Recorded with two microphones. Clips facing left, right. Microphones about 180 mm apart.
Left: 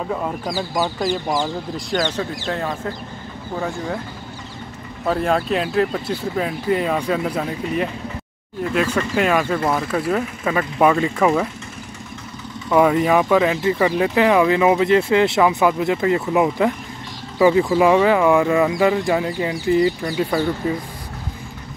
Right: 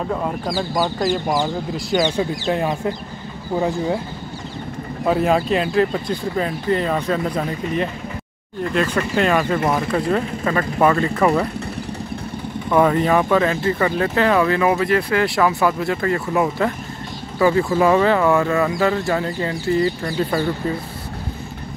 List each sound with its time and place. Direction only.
0.9 s speech: centre (ahead or behind)
2.0 s speech: 10° right (ahead or behind)
5.0 s speech: 5° right (ahead or behind); by 11.2 s 10° left (ahead or behind)
12.7 s speech: 10° left (ahead or behind)